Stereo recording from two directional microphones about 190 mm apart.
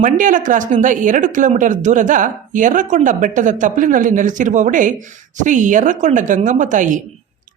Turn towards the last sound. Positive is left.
turn(degrees=-40)  # may be behind; listen again after turning